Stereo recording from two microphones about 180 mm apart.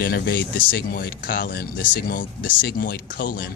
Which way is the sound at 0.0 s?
60° left (ahead or behind).